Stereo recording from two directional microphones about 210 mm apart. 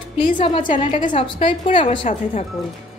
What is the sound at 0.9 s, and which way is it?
A woman's voice, 35° left (ahead or behind).